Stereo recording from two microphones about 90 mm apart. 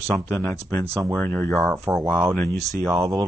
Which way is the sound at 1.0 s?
Centre (ahead or behind).